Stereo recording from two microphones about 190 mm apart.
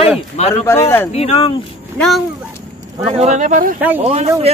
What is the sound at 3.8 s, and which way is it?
Speech, 10° right (ahead or behind).